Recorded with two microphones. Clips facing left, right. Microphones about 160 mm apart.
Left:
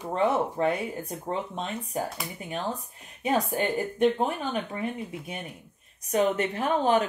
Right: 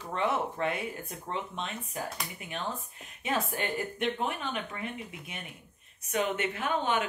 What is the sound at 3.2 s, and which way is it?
Speech, 30° left (ahead or behind).